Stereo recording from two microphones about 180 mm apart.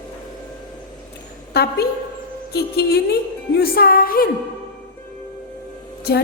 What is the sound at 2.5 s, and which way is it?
A woman's voice, 60° left (ahead or behind).